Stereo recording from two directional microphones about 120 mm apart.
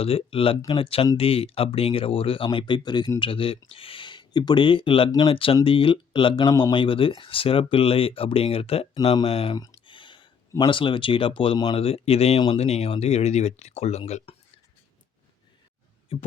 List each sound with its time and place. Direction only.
0.0 s speech: 50° left (ahead or behind)
6.5 s speech: 35° left (ahead or behind); by 9.6 s 50° left (ahead or behind)
9.8 s a sound: 45° left (ahead or behind)
10.7 s speech: 45° left (ahead or behind)